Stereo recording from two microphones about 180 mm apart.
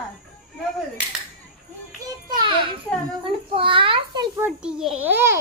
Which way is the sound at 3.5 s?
30° right (ahead or behind).